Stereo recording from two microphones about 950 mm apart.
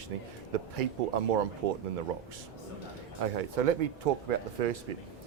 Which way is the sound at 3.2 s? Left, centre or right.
Right.